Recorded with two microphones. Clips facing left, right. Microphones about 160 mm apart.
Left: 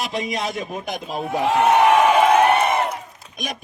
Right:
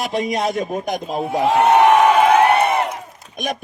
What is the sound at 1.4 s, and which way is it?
Speech, 35° right (ahead or behind).